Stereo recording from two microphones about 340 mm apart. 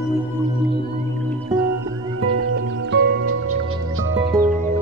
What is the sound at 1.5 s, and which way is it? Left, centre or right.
Music, centre.